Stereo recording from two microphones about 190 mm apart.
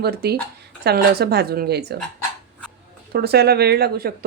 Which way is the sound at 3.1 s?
55° right (ahead or behind).